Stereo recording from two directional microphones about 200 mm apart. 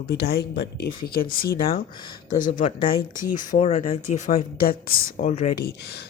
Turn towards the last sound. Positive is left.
turn(degrees=40)  # may be behind; listen again after turning